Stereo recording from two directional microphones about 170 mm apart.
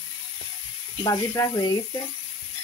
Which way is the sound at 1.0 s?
20° left (ahead or behind).